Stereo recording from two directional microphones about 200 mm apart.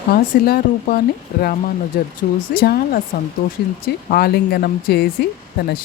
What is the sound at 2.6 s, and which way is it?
Speech, 50° left (ahead or behind).